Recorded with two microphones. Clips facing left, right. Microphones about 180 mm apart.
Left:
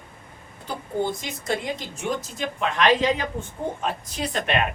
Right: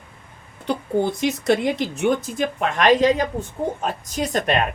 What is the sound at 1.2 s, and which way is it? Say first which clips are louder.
A woman's voice: right 9 dB; 70° right (ahead or behind).